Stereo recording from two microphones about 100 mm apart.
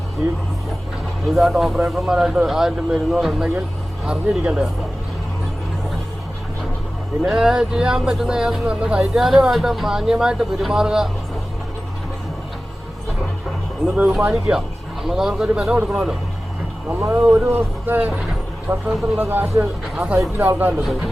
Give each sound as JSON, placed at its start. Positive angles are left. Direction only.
{"t": 1.4, "sound": "speech", "side_deg": 0}
{"t": 7.3, "sound": "speech", "side_deg": -5}
{"t": 13.8, "sound": "speech", "side_deg": -10}
{"t": 17.0, "sound": "speech", "side_deg": -25}